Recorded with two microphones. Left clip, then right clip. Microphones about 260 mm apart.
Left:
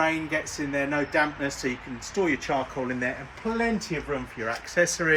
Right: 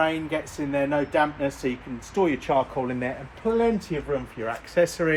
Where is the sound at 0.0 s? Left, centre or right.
Centre.